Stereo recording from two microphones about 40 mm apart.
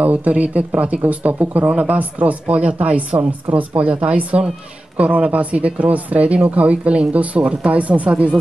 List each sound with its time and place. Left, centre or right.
0.0 s speech: right